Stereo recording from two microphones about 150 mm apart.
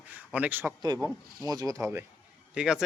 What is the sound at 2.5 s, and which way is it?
Speech, 5° right (ahead or behind).